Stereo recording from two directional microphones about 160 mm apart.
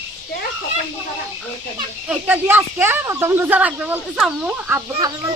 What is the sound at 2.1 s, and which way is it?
Speech, 10° right (ahead or behind).